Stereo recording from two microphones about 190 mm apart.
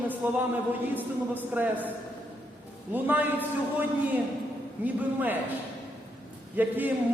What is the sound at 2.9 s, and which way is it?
Speech, 10° right (ahead or behind).